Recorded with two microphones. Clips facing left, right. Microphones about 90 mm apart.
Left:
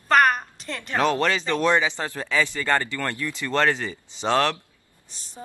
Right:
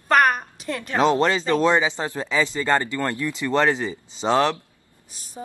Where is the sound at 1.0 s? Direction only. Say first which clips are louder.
Right 3 dB; 20° right (ahead or behind).